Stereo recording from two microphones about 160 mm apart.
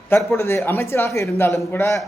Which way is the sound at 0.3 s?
15° left (ahead or behind).